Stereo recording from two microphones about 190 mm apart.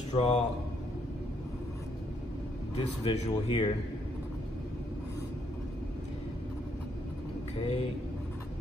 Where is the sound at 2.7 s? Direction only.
30° left (ahead or behind).